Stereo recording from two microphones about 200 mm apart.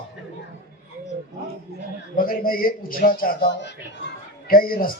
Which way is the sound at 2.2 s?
45° left (ahead or behind).